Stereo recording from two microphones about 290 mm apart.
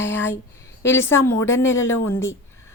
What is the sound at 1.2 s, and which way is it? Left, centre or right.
Speech, centre.